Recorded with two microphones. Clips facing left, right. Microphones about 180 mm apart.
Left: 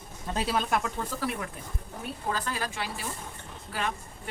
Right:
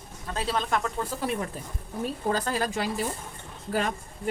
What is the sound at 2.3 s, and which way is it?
A woman's voice, 40° right (ahead or behind).